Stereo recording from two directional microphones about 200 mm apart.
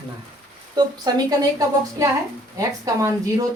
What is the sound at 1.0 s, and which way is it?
A woman's voice, 20° right (ahead or behind).